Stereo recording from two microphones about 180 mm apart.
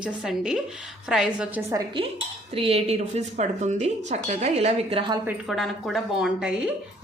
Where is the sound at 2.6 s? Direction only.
35° right (ahead or behind).